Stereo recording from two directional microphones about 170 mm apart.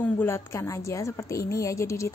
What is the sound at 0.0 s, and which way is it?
A woman's voice, 15° left (ahead or behind).